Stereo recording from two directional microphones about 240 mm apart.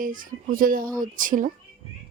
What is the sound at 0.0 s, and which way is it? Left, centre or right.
Speech, right.